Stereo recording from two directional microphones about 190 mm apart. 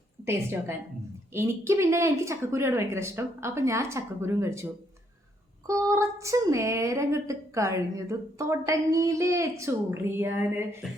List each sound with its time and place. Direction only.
0.3 s a woman's voice: 15° right (ahead or behind)